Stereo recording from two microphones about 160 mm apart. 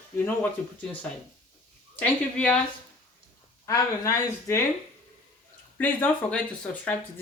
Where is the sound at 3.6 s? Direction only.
20° left (ahead or behind).